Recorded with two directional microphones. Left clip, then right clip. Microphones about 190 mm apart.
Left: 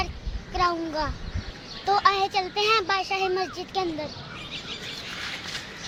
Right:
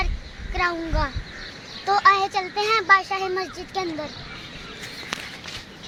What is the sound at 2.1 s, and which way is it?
Child singing, 35° left (ahead or behind).